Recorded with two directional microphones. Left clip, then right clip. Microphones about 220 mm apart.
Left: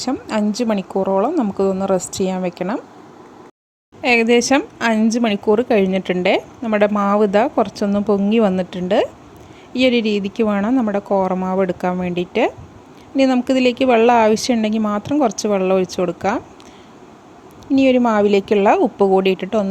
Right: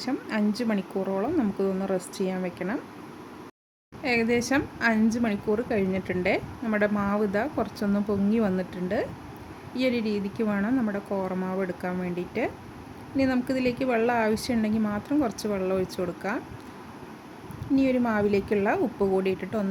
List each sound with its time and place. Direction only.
0.0 s speech: 30° left (ahead or behind)
4.0 s a woman's voice: 35° left (ahead or behind)
17.7 s a woman's voice: 35° left (ahead or behind)